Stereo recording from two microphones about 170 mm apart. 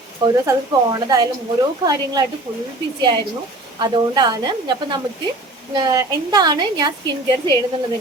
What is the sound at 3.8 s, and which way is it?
Speech, 25° right (ahead or behind).